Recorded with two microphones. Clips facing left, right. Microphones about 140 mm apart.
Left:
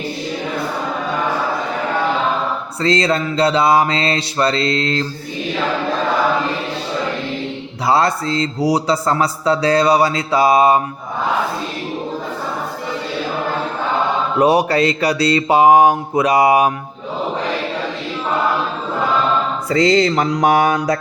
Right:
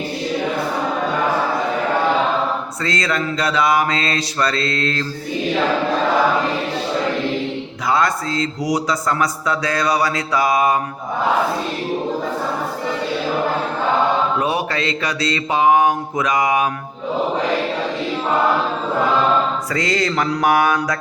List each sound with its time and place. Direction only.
2.8 s speech: 30° left (ahead or behind)
7.9 s speech: 30° left (ahead or behind)
14.4 s a sound: 35° left (ahead or behind)
19.7 s speech: 25° left (ahead or behind)